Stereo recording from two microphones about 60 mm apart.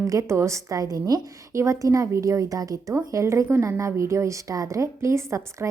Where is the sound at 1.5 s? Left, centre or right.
Right.